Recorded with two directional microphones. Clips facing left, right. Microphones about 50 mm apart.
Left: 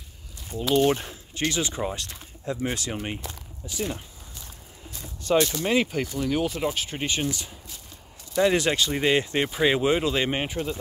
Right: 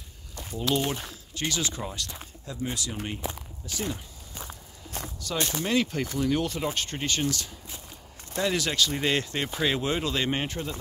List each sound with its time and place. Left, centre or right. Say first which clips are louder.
0.6 s speech: left 5 dB; centre
0.8 s speech: left 8 dB; left
3.2 s speech: right 4 dB; centre
4.4 s walk: right 6 dB; right
5.2 s speech: left 9 dB; left
5.6 s speech: left 2 dB; centre
6.1 s speech: even; centre
7.0 s speech: left 1 dB; centre